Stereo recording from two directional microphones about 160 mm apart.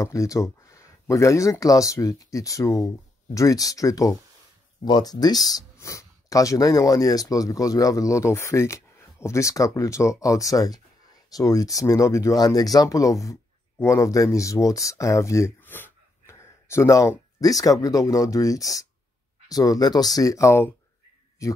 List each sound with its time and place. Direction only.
0.0 s speech: 20° left (ahead or behind)